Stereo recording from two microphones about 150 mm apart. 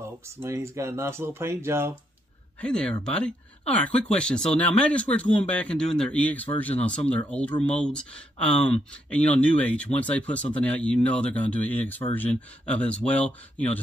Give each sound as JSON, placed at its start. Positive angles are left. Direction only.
{"t": 0.4, "sound": "speech", "side_deg": -20}
{"t": 2.6, "sound": "speech", "side_deg": 5}